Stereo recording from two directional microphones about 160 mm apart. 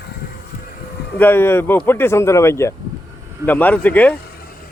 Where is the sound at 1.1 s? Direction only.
15° left (ahead or behind).